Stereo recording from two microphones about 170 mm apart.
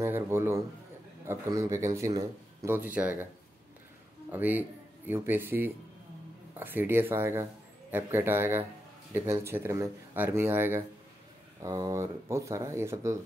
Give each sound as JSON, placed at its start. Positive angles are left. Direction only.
{"t": 0.0, "sound": "speech", "side_deg": -15}
{"t": 4.3, "sound": "speech", "side_deg": -10}